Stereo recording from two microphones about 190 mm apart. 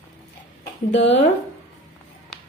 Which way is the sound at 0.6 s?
70° left (ahead or behind).